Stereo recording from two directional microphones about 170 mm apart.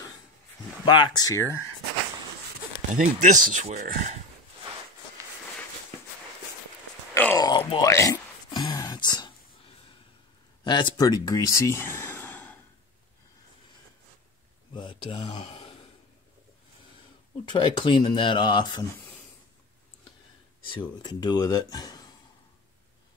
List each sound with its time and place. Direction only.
0.8 s speech: 25° left (ahead or behind)
3.0 s speech: 45° right (ahead or behind)
7.3 s a sound: 25° left (ahead or behind)
7.9 s speech: 20° left (ahead or behind)
8.5 s a sound: 25° left (ahead or behind)
10.6 s speech: 25° left (ahead or behind); by 12.5 s 10° left (ahead or behind)
14.7 s a sound: 30° left (ahead or behind)
17.5 s speech: 25° left (ahead or behind)
20.6 s speech: 25° left (ahead or behind)